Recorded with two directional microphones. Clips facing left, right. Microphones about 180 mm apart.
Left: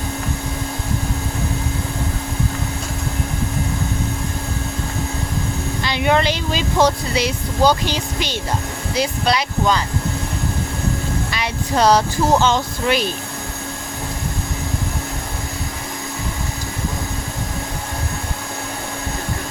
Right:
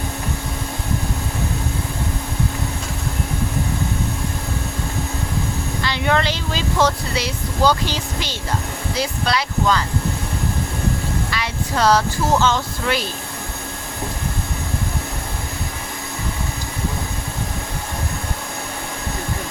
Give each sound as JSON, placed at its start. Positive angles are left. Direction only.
{"t": 5.8, "sound": "speech", "side_deg": 15}
{"t": 11.3, "sound": "speech", "side_deg": 20}